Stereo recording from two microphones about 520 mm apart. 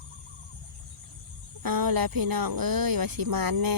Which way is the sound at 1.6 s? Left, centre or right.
Right.